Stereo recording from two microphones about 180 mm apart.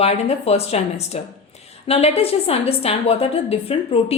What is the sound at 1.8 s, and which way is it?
A woman's voice, 35° left (ahead or behind).